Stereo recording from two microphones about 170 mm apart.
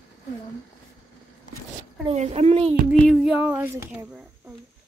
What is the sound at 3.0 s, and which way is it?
Speech, 5° right (ahead or behind).